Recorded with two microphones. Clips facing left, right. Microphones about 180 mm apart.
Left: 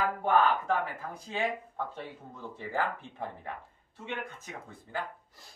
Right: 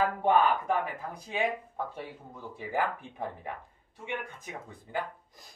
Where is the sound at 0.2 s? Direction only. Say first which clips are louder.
Even; 15° right (ahead or behind).